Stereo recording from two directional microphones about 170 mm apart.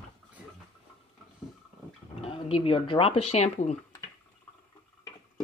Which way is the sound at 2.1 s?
35° left (ahead or behind).